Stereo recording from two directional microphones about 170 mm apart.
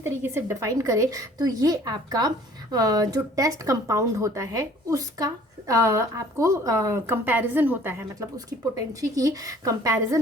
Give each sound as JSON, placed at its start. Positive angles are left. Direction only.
{"t": 0.0, "sound": "speech", "side_deg": -15}